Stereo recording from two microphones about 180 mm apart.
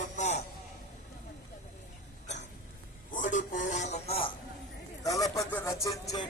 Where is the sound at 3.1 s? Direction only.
45° left (ahead or behind).